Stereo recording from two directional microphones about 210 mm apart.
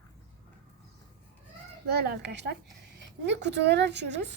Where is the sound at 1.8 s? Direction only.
50° right (ahead or behind).